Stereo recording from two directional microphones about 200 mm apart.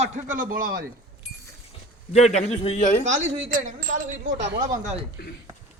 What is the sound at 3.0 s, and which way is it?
Speech, 35° right (ahead or behind).